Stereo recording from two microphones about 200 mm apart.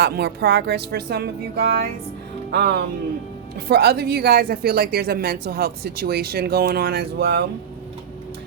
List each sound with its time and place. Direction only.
0.0 s speech: 55° right (ahead or behind)